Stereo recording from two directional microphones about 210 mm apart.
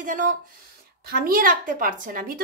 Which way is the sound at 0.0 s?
40° right (ahead or behind).